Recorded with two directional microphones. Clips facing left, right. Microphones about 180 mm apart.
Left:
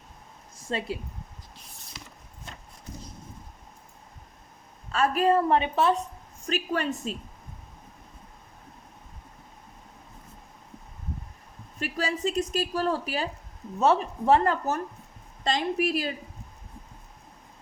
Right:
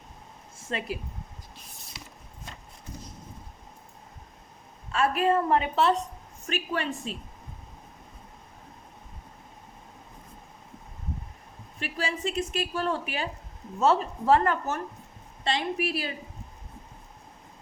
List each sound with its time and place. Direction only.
0.7 s a woman's voice: 30° left (ahead or behind)
4.9 s a woman's voice: 40° left (ahead or behind)
5.5 s a woman's voice: 15° left (ahead or behind)
6.5 s a woman's voice: 40° left (ahead or behind)
11.8 s a woman's voice: 40° left (ahead or behind)
13.7 s a woman's voice: 20° left (ahead or behind); by 16.1 s 40° left (ahead or behind)